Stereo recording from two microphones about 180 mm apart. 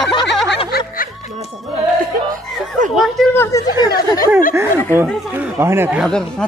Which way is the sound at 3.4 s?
15° left (ahead or behind).